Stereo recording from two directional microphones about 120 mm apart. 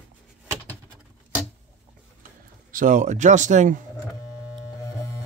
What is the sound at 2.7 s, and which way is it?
Speech, 90° right.